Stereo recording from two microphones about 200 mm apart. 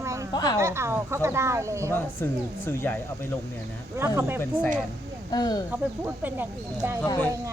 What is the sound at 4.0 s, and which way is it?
Speech, 10° right (ahead or behind).